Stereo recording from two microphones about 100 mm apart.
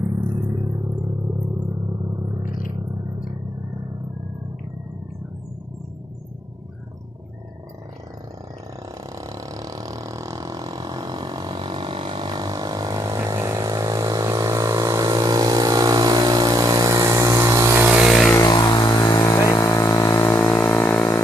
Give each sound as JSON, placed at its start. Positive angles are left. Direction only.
{"t": 0.3, "sound": "music", "side_deg": -40}
{"t": 9.0, "sound": "vehicle", "side_deg": -35}
{"t": 17.8, "sound": "vehicle", "side_deg": -15}
{"t": 18.3, "sound": "vehicle", "side_deg": 45}
{"t": 20.1, "sound": "a sound", "side_deg": 20}